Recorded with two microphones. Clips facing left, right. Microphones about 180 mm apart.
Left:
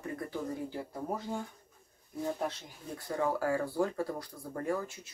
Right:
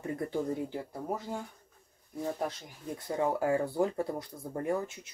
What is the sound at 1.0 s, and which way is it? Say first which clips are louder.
Speech: even; 10° right (ahead or behind).